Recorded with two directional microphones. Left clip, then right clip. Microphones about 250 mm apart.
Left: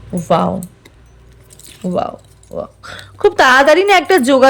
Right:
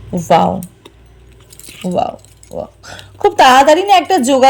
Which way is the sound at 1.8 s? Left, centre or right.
Centre.